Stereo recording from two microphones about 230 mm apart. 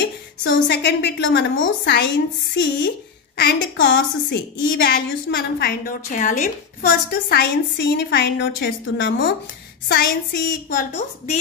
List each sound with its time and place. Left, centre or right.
0.0 s a woman's voice: left
9.8 s a woman's voice: left